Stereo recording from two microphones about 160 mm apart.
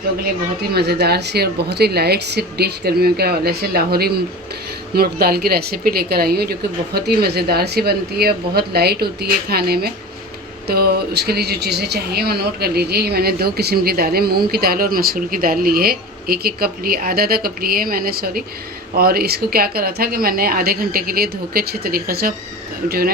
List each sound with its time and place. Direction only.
0.7 s a woman's voice: 90° right; by 23.1 s 70° right (ahead or behind)